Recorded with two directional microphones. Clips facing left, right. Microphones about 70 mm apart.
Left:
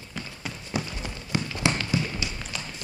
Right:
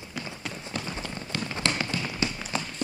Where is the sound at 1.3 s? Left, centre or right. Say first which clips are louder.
Left 4 dB; centre.